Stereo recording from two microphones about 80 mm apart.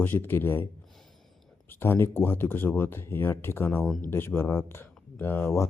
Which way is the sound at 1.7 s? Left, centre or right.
Left.